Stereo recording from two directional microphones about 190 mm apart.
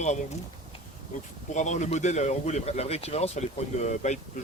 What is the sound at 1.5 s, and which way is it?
Speech, 40° left (ahead or behind).